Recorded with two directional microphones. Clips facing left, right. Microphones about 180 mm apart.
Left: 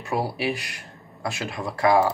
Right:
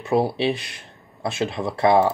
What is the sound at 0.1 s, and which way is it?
Speech, 25° right (ahead or behind).